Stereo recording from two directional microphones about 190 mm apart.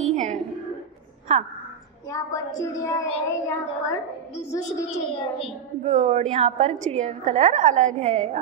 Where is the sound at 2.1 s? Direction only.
20° left (ahead or behind).